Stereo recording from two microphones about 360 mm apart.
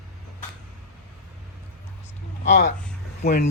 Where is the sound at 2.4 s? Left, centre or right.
Centre.